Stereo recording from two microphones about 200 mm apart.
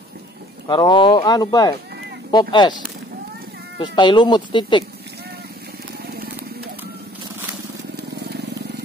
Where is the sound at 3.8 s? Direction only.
25° left (ahead or behind).